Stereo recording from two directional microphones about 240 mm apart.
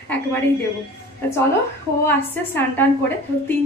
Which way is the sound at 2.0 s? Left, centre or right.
Centre.